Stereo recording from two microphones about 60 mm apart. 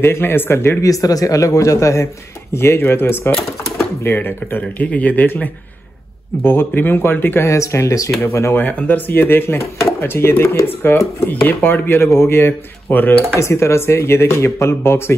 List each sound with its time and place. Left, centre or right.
0.0 s speech: left
0.8 s a man's voice: left
2.5 s speech: left
7.4 s a man's voice: left
8.2 s speech: left
8.7 s speech: left
10.9 s speech: left
13.4 s speech: left